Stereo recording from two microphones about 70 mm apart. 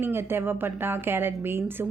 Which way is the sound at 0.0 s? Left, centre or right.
Right.